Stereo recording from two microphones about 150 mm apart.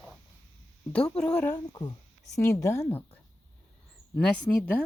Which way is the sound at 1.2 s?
10° left (ahead or behind).